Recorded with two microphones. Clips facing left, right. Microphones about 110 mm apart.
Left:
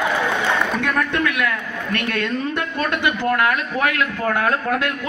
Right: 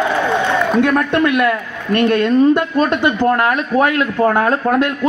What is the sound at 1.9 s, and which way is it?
Speech, 40° right (ahead or behind).